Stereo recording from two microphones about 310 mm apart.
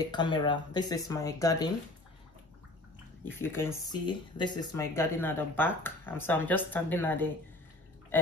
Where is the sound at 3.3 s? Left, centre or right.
Centre.